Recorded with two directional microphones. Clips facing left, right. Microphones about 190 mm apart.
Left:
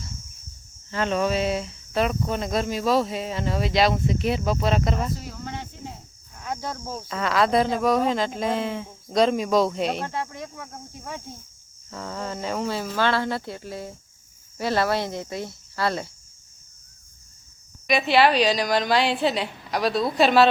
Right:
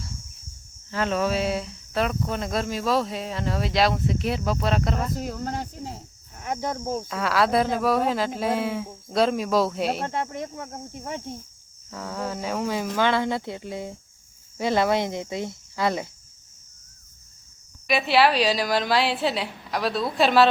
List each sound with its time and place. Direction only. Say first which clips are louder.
0.9 s speech: left 1 dB; 5° right (ahead or behind)
5.1 s speech: right 5 dB; 45° right (ahead or behind)
6.3 s speech: right 3 dB; 20° right (ahead or behind)
7.1 s speech: left 2 dB; 5° right (ahead or behind)
10.0 s speech: right 2 dB; 25° right (ahead or behind)
11.9 s speech: right 1 dB; 5° right (ahead or behind)
17.8 s speech: left 1 dB; 5° right (ahead or behind)